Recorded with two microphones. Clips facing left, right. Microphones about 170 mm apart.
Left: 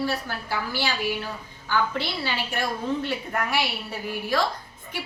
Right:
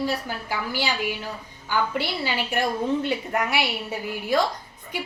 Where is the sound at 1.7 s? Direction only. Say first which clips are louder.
Right 1 dB; 10° right (ahead or behind).